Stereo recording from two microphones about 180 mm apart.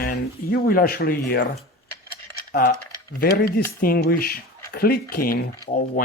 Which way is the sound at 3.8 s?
55° left (ahead or behind).